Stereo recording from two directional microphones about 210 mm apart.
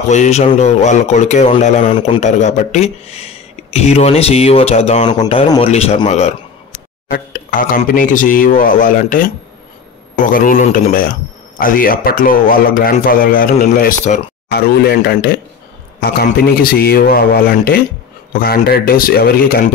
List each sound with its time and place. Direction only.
0.1 s a man's voice: 35° left (ahead or behind)
7.1 s speech: 40° left (ahead or behind)